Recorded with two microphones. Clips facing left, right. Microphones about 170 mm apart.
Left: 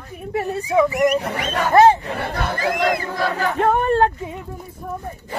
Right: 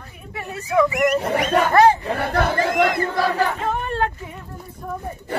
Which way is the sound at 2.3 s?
60° right (ahead or behind).